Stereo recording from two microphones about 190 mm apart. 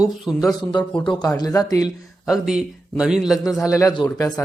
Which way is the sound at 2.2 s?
5° right (ahead or behind).